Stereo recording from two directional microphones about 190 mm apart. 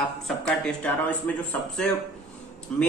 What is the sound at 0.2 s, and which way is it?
Speech, 5° left (ahead or behind).